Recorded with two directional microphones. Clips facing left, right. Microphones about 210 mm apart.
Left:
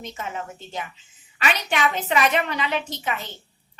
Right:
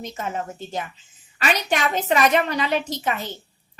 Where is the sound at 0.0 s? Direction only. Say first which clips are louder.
Right 3 dB; 40° right (ahead or behind).